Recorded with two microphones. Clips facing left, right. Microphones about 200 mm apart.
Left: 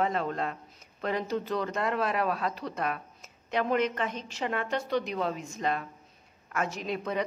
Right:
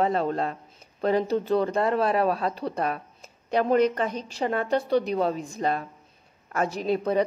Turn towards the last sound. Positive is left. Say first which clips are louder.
# right 8 dB
turn(degrees=-35)  # may be behind; listen again after turning